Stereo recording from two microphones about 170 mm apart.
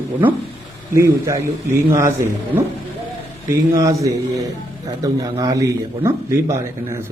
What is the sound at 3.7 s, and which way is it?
A man's voice, 20° right (ahead or behind).